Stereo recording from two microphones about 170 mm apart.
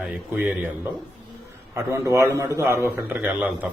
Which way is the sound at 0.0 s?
5° right (ahead or behind).